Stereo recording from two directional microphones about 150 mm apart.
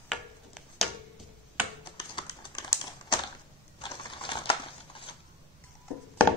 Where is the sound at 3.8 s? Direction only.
30° left (ahead or behind).